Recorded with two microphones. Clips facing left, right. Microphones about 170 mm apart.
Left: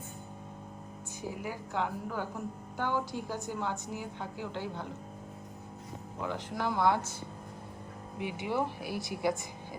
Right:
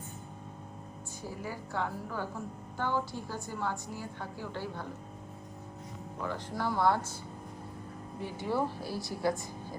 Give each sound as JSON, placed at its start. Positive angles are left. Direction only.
{"t": 1.2, "sound": "a woman's voice", "side_deg": 15}
{"t": 6.2, "sound": "a woman's voice", "side_deg": 15}
{"t": 8.2, "sound": "a woman's voice", "side_deg": 15}